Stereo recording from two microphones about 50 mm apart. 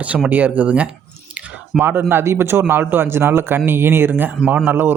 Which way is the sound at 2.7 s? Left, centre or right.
Right.